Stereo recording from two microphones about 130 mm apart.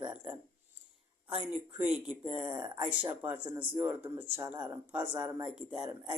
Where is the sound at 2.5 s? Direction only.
35° right (ahead or behind).